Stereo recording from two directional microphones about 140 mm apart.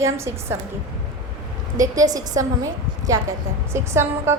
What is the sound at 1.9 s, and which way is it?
A woman's voice, 25° right (ahead or behind).